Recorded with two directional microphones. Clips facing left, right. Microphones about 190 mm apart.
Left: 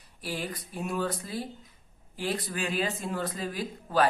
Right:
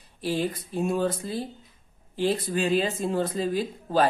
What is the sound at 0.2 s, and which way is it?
Speech, 25° right (ahead or behind).